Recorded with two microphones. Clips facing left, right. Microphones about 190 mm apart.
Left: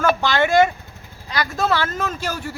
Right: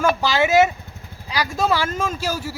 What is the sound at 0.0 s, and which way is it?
Speech, 10° right (ahead or behind).